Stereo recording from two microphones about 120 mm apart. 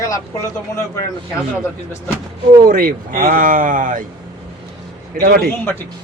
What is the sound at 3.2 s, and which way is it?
Speech, 90° right.